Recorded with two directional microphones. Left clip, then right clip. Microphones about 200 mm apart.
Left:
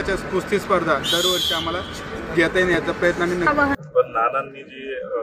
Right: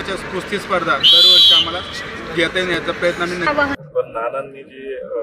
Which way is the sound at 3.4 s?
45° left (ahead or behind).